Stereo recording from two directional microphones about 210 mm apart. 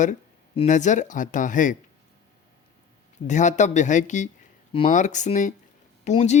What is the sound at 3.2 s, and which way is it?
Speech, 35° left (ahead or behind).